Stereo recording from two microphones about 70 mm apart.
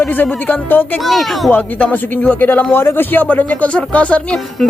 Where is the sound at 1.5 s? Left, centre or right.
Left.